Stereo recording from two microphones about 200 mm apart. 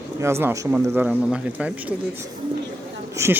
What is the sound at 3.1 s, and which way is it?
Speech, 15° right (ahead or behind).